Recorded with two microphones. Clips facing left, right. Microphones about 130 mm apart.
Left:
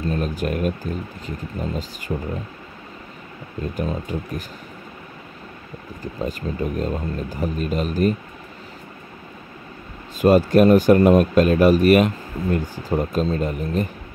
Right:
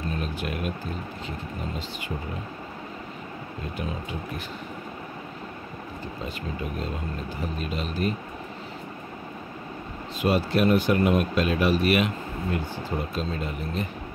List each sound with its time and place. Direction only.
0.1 s speech: 40° left (ahead or behind)
3.7 s speech: 40° left (ahead or behind)
6.2 s speech: 40° left (ahead or behind)
10.2 s speech: 45° left (ahead or behind)